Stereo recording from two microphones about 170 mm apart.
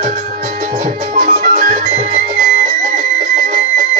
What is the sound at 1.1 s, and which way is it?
Music, 50° right (ahead or behind).